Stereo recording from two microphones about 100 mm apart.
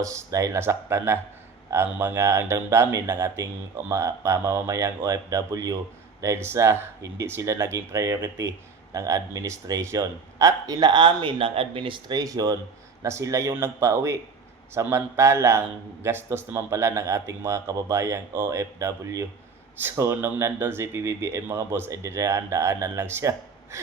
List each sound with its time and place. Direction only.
0.0 s speech: 30° right (ahead or behind)
6.2 s speech: 25° right (ahead or behind)